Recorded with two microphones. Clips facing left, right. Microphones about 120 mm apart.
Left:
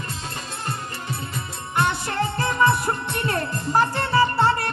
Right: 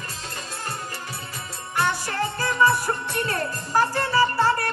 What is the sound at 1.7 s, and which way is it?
Music, 25° left (ahead or behind).